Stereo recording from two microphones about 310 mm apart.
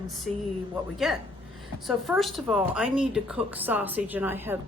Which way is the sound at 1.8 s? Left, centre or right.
Centre.